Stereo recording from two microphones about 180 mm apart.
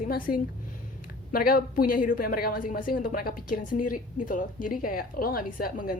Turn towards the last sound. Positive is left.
turn(degrees=55)  # may be behind; listen again after turning